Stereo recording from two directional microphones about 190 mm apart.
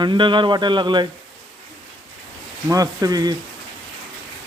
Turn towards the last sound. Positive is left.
turn(degrees=-20)  # may be behind; listen again after turning